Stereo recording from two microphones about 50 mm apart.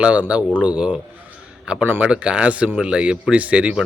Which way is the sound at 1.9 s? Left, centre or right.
Right.